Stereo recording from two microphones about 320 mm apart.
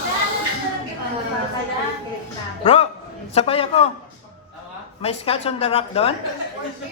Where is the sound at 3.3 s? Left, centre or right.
Centre.